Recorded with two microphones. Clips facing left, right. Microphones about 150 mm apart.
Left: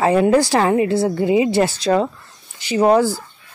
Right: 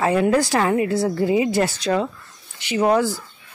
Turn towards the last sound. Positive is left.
turn(degrees=30)  # may be behind; listen again after turning